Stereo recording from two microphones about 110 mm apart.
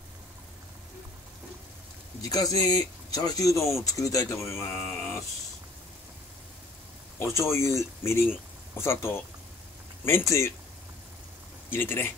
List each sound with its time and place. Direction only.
2.2 s speech: 35° left (ahead or behind)
7.2 s speech: 25° left (ahead or behind)
11.7 s speech: 20° left (ahead or behind)